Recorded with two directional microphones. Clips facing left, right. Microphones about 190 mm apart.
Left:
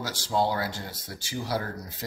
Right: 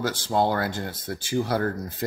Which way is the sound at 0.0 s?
55° right (ahead or behind).